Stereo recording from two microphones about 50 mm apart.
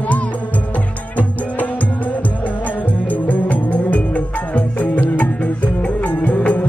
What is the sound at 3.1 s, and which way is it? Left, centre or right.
Music, left.